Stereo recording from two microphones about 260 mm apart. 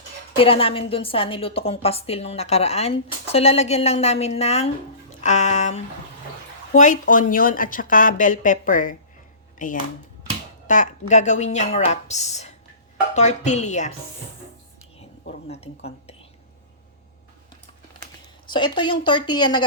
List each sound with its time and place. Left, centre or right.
0.3 s a woman's voice: left
15.2 s a woman's voice: left
18.5 s speech: centre